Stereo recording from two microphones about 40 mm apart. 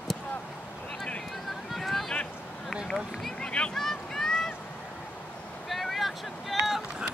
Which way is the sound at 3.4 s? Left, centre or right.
Left.